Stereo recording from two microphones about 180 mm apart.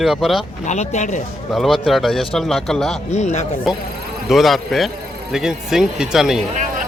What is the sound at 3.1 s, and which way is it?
Speech, 40° left (ahead or behind).